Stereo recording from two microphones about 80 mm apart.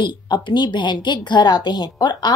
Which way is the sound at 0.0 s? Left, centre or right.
Left.